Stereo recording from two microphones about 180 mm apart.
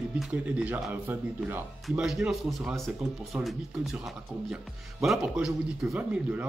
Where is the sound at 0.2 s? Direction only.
5° right (ahead or behind).